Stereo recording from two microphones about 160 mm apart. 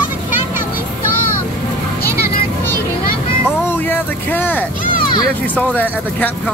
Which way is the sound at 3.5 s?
10° left (ahead or behind).